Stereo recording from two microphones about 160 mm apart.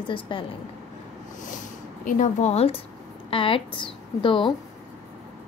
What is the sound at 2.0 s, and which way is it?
A woman's voice, 50° left (ahead or behind).